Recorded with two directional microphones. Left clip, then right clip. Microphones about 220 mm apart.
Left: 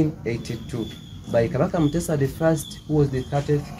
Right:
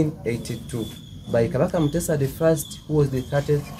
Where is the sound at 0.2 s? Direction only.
5° right (ahead or behind).